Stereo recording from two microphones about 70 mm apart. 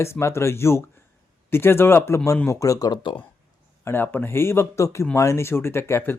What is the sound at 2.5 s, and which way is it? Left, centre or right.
Speech, left.